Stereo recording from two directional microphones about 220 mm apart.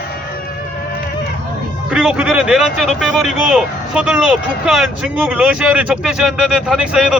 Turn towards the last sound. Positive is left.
turn(degrees=-5)  # may be behind; listen again after turning